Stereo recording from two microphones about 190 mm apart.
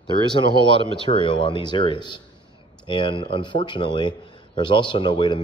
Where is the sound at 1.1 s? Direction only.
25° left (ahead or behind).